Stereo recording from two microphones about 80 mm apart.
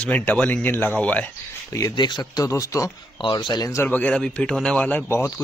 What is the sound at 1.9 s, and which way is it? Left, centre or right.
Speech, left.